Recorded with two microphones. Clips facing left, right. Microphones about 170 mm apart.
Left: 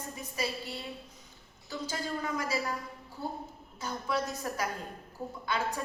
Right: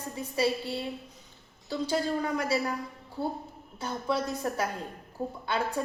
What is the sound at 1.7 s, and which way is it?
A woman's voice, 30° right (ahead or behind).